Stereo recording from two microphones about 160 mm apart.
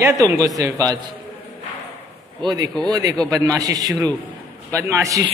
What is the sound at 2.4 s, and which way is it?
A woman's voice, 25° right (ahead or behind).